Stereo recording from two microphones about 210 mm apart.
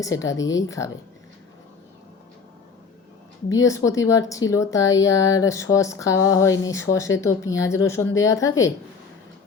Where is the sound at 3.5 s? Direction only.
15° left (ahead or behind).